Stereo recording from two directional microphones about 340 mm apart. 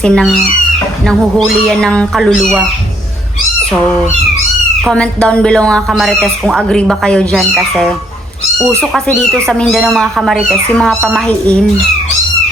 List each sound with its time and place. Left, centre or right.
0.0 s speech: centre
4.8 s speech: centre